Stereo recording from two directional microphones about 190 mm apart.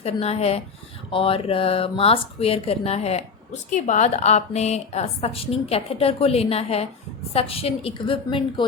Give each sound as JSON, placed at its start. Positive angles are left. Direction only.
{"t": 0.0, "sound": "speech", "side_deg": 35}